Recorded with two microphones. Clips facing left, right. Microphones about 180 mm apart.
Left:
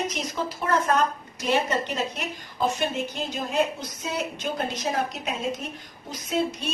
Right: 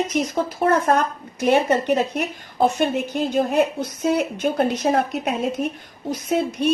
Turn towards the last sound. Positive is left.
turn(degrees=-55)  # may be behind; listen again after turning